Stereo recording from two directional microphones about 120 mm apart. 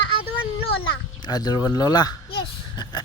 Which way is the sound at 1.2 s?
35° left (ahead or behind).